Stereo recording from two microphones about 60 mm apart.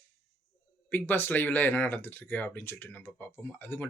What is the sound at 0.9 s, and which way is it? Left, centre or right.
Speech, left.